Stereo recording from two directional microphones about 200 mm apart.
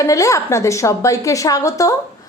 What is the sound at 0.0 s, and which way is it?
A woman's voice, 15° left (ahead or behind).